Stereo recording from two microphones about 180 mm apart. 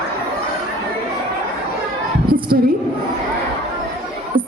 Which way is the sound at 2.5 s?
55° right (ahead or behind).